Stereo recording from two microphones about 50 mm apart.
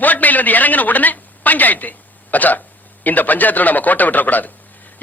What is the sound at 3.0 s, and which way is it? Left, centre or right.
A man's voice, left.